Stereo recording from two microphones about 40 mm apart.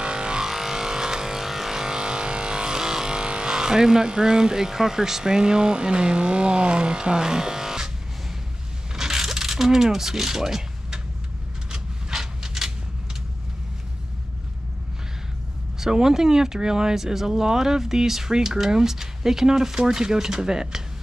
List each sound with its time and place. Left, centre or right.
0.0 s vehicle: right
0.5 s vehicle: centre
8.9 s a sound: centre
15.8 s speech: centre